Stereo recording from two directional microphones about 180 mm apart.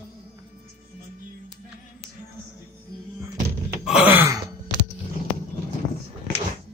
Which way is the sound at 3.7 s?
5° right (ahead or behind).